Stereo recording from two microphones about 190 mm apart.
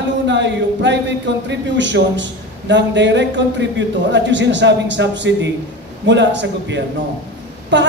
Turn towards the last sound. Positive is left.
turn(degrees=-70)  # may be behind; listen again after turning